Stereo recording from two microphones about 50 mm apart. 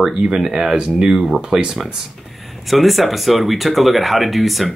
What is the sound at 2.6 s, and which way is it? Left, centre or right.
Speech, centre.